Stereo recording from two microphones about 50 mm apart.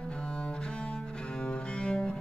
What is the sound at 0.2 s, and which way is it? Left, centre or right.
Cello, left.